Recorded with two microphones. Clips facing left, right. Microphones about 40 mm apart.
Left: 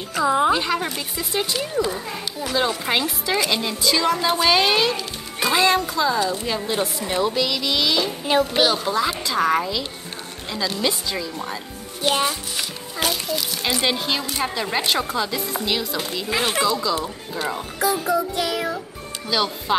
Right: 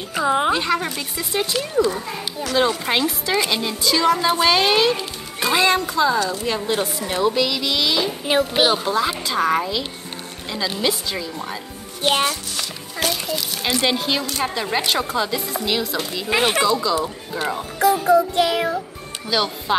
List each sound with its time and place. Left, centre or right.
0.2 s music: right
0.5 s speech: centre
12.3 s music: centre
14.4 s speech: centre
16.3 s music: right
16.6 s speech: centre
18.0 s music: right
19.2 s speech: centre